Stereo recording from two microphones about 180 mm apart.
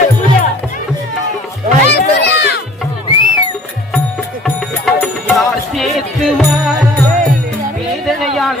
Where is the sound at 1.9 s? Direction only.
70° left (ahead or behind).